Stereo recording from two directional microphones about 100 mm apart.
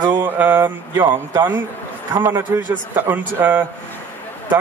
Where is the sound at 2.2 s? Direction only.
20° right (ahead or behind).